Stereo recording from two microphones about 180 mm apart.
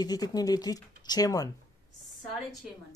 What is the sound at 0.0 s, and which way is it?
Speech, 20° left (ahead or behind).